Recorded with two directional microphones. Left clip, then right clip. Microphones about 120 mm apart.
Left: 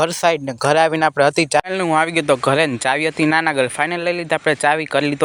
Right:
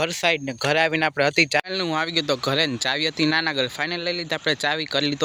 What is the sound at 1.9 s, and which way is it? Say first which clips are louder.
Speech: left 8 dB; 15° left (ahead or behind).